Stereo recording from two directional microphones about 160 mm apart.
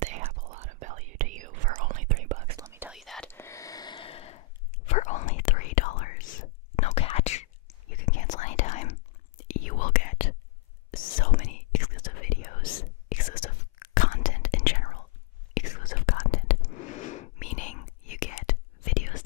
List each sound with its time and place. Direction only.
0.0 s whispering: 45° right (ahead or behind)
2.5 s whispering: 15° right (ahead or behind)
2.9 s whispering: centre (ahead or behind)
3.3 s a sound: 15° left (ahead or behind); by 4.4 s 35° left (ahead or behind)
4.8 s whispering: 50° left (ahead or behind)
7.9 s whispering: 60° left (ahead or behind)